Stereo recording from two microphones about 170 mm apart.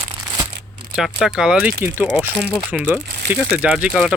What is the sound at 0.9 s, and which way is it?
Speech, 5° right (ahead or behind).